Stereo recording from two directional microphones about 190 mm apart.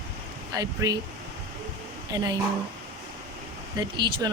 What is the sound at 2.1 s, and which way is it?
Speech, 20° right (ahead or behind).